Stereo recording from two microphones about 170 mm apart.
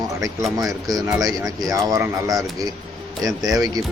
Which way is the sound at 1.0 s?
20° right (ahead or behind).